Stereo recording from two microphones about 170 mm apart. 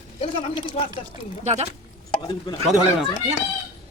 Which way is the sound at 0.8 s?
35° left (ahead or behind).